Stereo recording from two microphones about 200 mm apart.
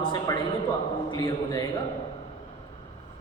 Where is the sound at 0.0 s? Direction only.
25° left (ahead or behind).